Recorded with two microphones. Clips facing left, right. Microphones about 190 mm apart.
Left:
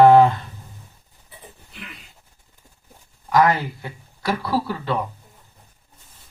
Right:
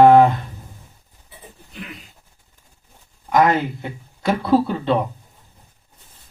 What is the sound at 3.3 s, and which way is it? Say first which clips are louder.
Speech: right 1 dB; 20° right (ahead or behind).